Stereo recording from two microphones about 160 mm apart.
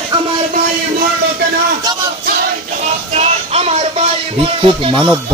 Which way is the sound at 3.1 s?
40° right (ahead or behind).